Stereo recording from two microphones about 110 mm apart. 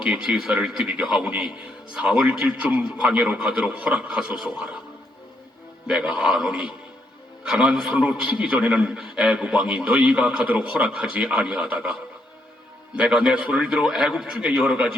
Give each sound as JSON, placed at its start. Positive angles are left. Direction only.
{"t": 0.0, "sound": "a man's voice", "side_deg": -5}
{"t": 5.9, "sound": "a man's voice", "side_deg": -5}
{"t": 13.0, "sound": "a man's voice", "side_deg": -5}